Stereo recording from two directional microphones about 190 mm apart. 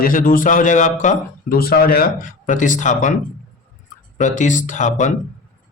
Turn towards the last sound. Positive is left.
turn(degrees=40)  # may be behind; listen again after turning